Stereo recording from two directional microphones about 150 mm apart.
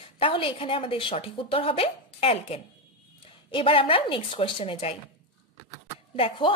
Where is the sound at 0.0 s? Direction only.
35° left (ahead or behind).